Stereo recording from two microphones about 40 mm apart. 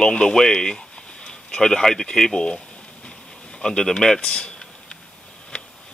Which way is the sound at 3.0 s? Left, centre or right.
Centre.